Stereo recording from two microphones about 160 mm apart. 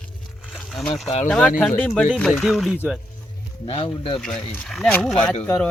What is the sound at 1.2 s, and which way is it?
Speech, 5° left (ahead or behind).